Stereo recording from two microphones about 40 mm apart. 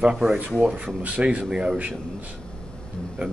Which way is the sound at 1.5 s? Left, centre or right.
Centre.